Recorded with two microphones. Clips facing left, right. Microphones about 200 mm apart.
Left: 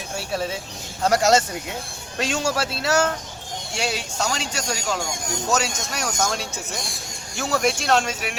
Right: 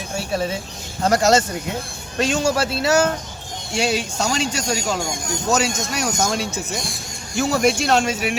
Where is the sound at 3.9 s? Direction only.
15° right (ahead or behind).